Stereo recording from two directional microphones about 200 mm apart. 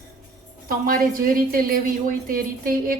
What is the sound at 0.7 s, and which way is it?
A woman's voice, 45° right (ahead or behind).